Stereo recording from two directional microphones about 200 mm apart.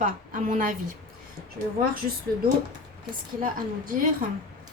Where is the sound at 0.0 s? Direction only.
40° right (ahead or behind).